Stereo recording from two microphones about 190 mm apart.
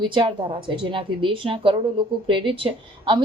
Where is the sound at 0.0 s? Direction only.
25° right (ahead or behind).